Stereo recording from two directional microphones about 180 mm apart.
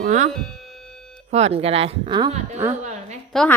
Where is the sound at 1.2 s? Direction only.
35° right (ahead or behind).